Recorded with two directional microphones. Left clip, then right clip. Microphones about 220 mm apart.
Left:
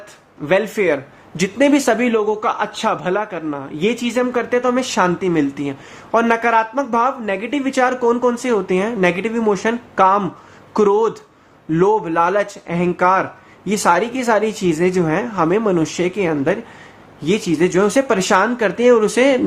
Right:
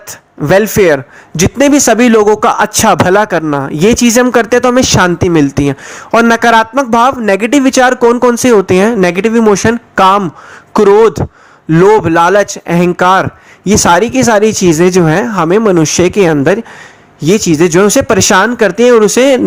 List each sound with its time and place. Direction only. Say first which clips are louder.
0.4 s a man's voice: right 9 dB; 45° right (ahead or behind)